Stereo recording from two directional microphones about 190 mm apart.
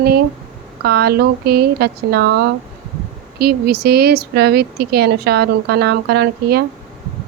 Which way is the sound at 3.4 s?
55° right (ahead or behind).